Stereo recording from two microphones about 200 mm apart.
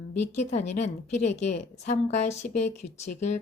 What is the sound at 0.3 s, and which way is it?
A woman's voice, 35° left (ahead or behind).